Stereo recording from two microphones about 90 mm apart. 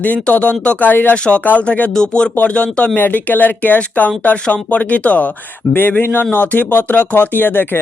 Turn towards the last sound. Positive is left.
turn(degrees=20)  # may be behind; listen again after turning